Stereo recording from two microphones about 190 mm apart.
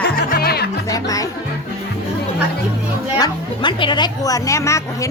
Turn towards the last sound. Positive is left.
turn(degrees=15)  # may be behind; listen again after turning